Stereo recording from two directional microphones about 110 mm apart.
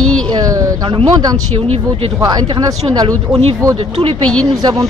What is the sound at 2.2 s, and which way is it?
Speech, 40° right (ahead or behind).